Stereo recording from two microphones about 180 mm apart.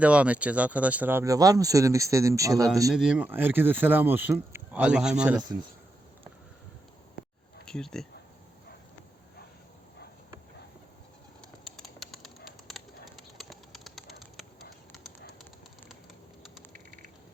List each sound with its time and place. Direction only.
0.0 s speech: 5° right (ahead or behind)
2.9 s speech: 5° right (ahead or behind)
7.2 s a sound: 50° left (ahead or behind)
7.6 s speech: 5° left (ahead or behind)
11.8 s bird: centre (ahead or behind)
13.4 s bird: centre (ahead or behind)